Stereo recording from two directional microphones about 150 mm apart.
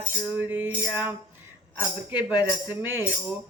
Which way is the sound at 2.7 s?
15° right (ahead or behind).